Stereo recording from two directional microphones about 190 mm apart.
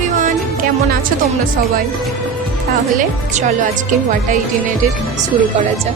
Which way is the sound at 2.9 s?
40° right (ahead or behind).